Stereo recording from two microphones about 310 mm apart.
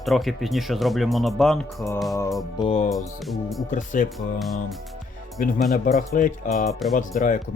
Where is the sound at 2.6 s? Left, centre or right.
Centre.